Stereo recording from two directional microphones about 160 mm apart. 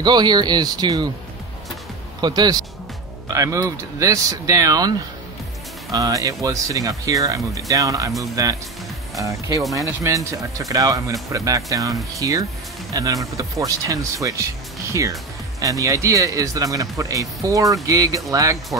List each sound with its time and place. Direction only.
0.0 s speech: 25° right (ahead or behind)
2.2 s speech: 25° right (ahead or behind)
9.6 s speech: centre (ahead or behind)
9.8 s speech: 20° right (ahead or behind)